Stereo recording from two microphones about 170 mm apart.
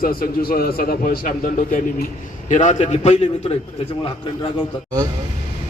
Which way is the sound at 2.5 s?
45° left (ahead or behind).